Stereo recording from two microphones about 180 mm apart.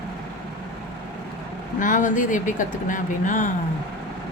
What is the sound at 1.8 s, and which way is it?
Speech, 45° left (ahead or behind).